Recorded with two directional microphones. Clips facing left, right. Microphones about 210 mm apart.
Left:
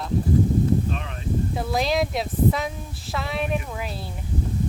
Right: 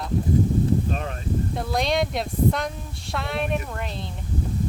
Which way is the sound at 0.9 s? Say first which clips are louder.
Right 2 dB; 45° right (ahead or behind).